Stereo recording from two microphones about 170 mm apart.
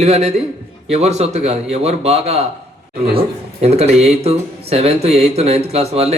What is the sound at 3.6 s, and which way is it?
A man's voice, 40° right (ahead or behind).